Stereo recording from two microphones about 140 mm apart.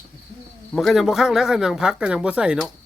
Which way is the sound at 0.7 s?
Centre (ahead or behind).